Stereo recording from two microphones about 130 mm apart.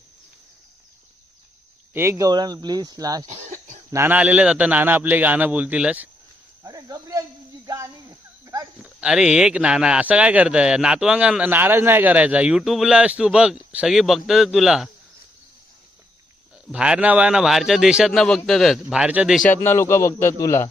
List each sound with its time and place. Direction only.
1.9 s speech: 20° right (ahead or behind)
3.9 s speech: 15° right (ahead or behind)
6.6 s a sound: 25° right (ahead or behind)
8.8 s speech: 5° right (ahead or behind)
16.7 s a man's voice: 10° right (ahead or behind)
19.5 s a man's voice: 20° left (ahead or behind)